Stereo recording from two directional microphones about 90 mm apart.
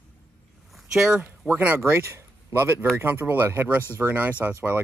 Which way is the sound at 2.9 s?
25° right (ahead or behind).